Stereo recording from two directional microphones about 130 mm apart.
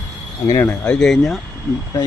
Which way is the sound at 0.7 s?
5° left (ahead or behind).